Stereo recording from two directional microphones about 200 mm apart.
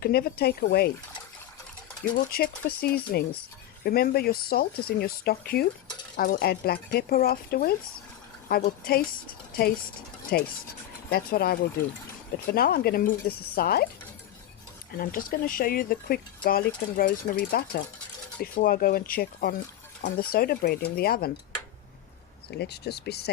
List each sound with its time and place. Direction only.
0.0 s speech: 50° left (ahead or behind)
2.1 s speech: 50° left (ahead or behind)
14.9 s speech: 45° left (ahead or behind)
22.4 s speech: 55° left (ahead or behind)